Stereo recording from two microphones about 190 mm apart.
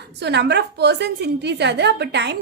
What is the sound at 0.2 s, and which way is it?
A woman's voice, 60° right (ahead or behind).